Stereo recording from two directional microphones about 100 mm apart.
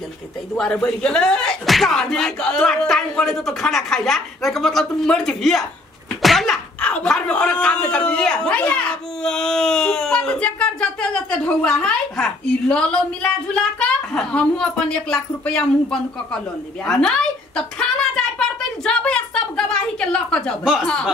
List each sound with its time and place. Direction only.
0.6 s speech: 5° left (ahead or behind)
16.8 s a sound: 5° left (ahead or behind)
20.8 s speech: 5° left (ahead or behind)